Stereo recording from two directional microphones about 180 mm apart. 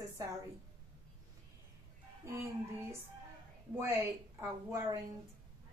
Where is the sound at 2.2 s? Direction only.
15° right (ahead or behind).